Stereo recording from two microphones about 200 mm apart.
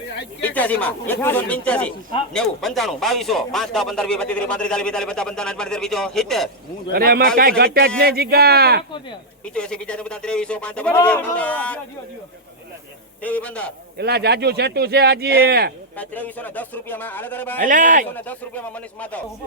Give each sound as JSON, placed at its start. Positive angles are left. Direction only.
{"t": 0.4, "sound": "speech", "side_deg": 10}
{"t": 6.9, "sound": "a man's voice", "side_deg": -50}
{"t": 9.6, "sound": "speech", "side_deg": 5}
{"t": 13.2, "sound": "speech", "side_deg": 5}
{"t": 14.0, "sound": "a man's voice", "side_deg": -55}
{"t": 16.0, "sound": "speech", "side_deg": 10}
{"t": 17.6, "sound": "a man's voice", "side_deg": -40}
{"t": 18.1, "sound": "speech", "side_deg": 10}